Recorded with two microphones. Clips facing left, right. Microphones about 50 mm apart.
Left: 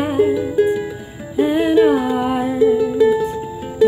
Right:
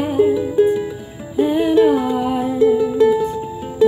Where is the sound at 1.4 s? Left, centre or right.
Left.